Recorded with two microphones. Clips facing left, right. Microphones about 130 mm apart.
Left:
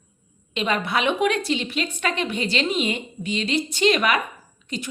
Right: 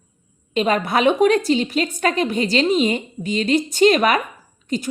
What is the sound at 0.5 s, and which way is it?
A woman's voice, 40° right (ahead or behind).